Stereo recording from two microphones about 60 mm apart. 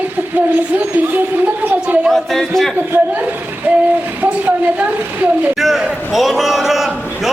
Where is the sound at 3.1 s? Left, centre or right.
Right.